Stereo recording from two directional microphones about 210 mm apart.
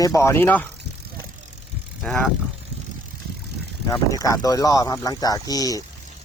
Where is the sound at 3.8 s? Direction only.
15° left (ahead or behind).